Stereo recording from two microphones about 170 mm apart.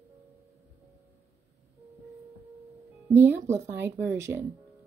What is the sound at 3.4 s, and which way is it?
Speech, 40° right (ahead or behind).